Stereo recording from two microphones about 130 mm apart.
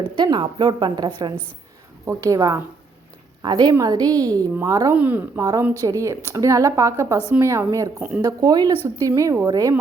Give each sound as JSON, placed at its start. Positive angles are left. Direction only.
{"t": 0.2, "sound": "a woman's voice", "side_deg": -35}
{"t": 4.9, "sound": "a woman's voice", "side_deg": -15}
{"t": 5.8, "sound": "a woman's voice", "side_deg": -25}